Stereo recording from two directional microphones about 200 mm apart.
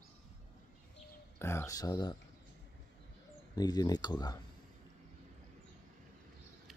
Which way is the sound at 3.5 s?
20° left (ahead or behind).